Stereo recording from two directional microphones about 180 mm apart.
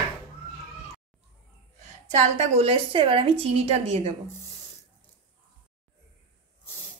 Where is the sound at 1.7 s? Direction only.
40° right (ahead or behind).